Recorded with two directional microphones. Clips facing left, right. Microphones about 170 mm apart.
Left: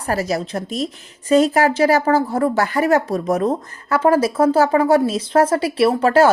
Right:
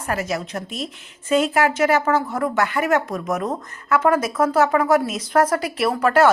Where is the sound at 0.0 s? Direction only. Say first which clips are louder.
Left 4 dB; 35° left (ahead or behind).